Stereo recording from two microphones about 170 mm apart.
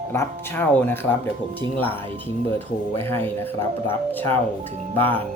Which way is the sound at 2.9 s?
15° left (ahead or behind).